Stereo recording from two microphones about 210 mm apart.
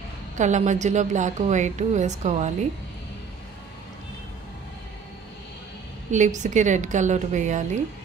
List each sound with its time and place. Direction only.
0.4 s a woman's voice: 35° right (ahead or behind)
6.1 s a woman's voice: 35° right (ahead or behind)